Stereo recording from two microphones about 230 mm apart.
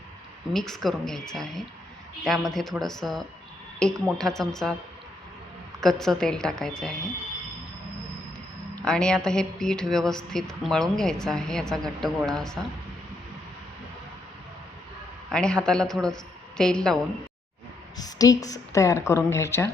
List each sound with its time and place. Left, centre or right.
0.5 s speech: centre
5.8 s speech: centre
8.7 s speech: centre
15.3 s speech: centre
17.9 s a woman's voice: centre